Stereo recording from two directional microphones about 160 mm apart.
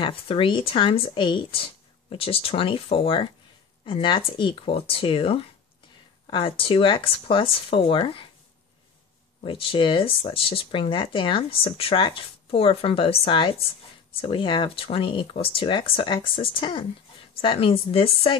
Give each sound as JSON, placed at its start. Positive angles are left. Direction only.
{"t": 0.0, "sound": "speech", "side_deg": 35}
{"t": 9.4, "sound": "speech", "side_deg": 35}